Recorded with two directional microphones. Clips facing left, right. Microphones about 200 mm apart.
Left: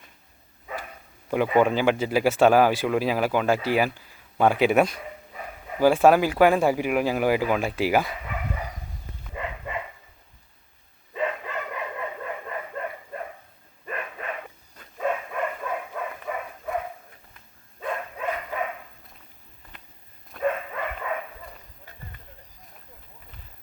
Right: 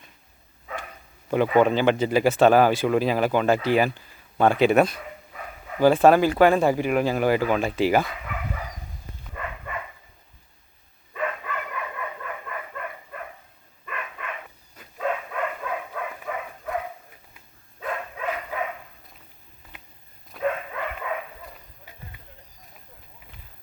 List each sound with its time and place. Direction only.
1.3 s a man's voice: 5° left (ahead or behind)
9.3 s dog: 20° left (ahead or behind)
11.1 s dog: 25° left (ahead or behind)
14.8 s a sound: 5° left (ahead or behind)
17.3 s dog: centre (ahead or behind)
20.3 s a sound: 5° right (ahead or behind)